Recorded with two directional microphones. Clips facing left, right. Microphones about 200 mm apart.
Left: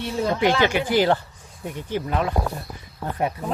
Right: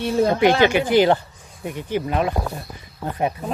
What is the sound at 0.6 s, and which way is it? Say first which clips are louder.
Speech: right 4 dB; 20° right (ahead or behind).